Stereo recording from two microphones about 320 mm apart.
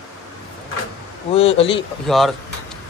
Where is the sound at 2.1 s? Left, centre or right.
Centre.